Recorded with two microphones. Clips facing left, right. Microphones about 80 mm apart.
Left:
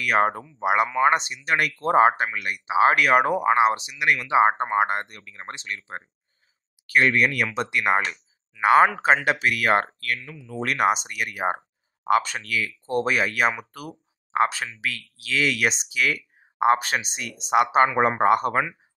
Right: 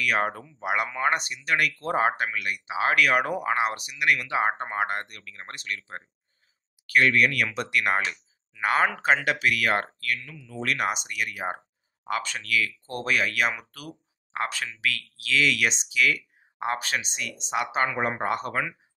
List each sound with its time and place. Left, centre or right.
0.0 s speech: left
8.1 s a sound: centre
9.0 s speech: left
10.6 s speech: left